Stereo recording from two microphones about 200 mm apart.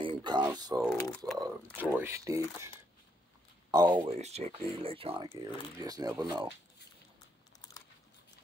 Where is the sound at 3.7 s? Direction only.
20° right (ahead or behind).